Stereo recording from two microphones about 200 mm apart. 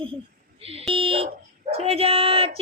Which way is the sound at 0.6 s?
30° right (ahead or behind).